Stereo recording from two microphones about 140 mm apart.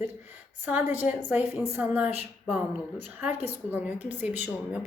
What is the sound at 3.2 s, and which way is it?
A woman's voice, 10° right (ahead or behind).